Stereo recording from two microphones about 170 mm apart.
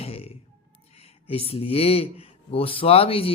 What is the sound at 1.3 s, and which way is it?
Speech, 35° left (ahead or behind).